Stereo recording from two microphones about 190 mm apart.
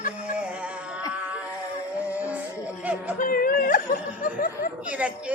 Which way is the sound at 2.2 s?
10° right (ahead or behind).